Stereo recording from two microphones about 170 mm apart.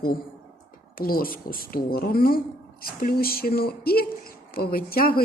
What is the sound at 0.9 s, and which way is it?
A woman's voice, 60° left (ahead or behind).